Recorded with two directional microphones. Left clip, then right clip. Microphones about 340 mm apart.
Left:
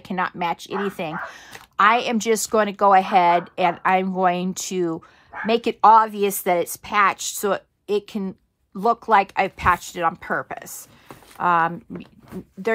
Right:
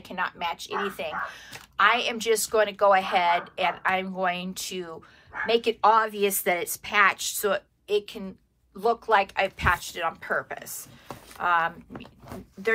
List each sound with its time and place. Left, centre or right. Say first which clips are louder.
0.0 s speech: left 5 dB; left